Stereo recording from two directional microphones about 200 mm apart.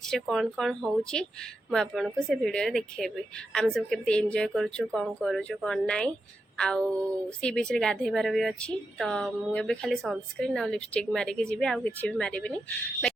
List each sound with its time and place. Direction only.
0.0 s a woman's voice: centre (ahead or behind)